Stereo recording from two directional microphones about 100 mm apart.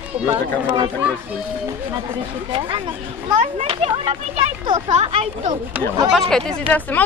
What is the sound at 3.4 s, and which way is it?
Speech, 75° right (ahead or behind).